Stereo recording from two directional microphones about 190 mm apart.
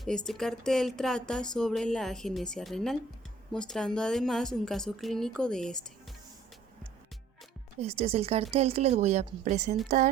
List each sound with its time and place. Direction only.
0.3 s speech: centre (ahead or behind)
7.8 s speech: 30° right (ahead or behind)
10.0 s a sound: 40° right (ahead or behind)